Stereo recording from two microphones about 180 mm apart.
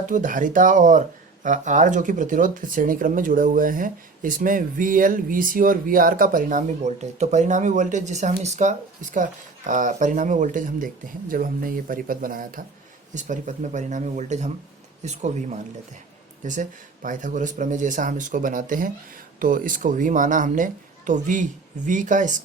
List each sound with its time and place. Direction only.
0.0 s speech: 45° right (ahead or behind)